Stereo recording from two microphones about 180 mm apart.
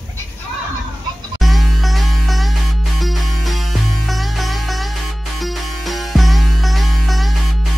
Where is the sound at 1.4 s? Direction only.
Centre (ahead or behind).